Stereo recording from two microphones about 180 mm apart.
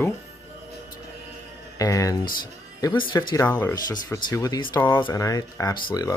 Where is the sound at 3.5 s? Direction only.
10° left (ahead or behind).